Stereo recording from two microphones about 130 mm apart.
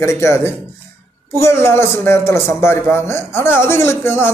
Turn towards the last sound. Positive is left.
turn(degrees=20)  # may be behind; listen again after turning